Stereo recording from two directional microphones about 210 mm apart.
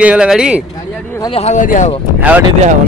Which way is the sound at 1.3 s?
30° left (ahead or behind).